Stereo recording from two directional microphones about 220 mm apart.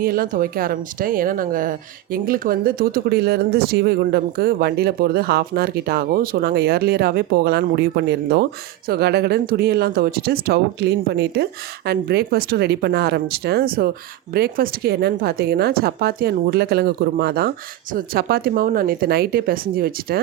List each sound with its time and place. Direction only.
0.0 s speech: 40° right (ahead or behind)